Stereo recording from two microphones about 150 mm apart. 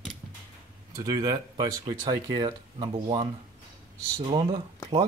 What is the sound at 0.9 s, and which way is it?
Speech, 25° right (ahead or behind).